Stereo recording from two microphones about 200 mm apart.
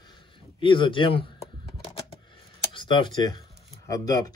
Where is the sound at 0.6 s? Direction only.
25° left (ahead or behind).